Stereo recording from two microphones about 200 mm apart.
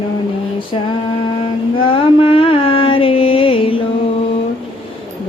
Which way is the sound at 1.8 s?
25° left (ahead or behind).